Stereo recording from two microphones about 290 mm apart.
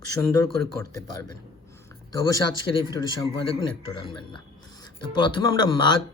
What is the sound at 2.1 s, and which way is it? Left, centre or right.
Speech, centre.